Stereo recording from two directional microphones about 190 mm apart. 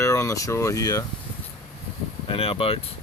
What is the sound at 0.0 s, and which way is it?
Speech, 15° left (ahead or behind).